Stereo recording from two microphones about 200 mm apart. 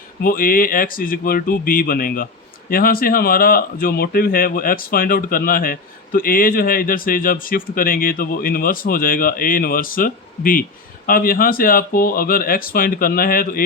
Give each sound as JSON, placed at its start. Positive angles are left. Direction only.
{"t": 0.2, "sound": "speech", "side_deg": 45}